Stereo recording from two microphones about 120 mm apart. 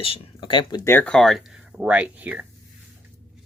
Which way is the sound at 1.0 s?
5° left (ahead or behind).